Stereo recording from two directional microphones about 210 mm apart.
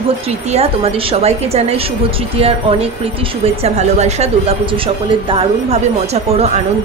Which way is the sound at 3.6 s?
30° right (ahead or behind).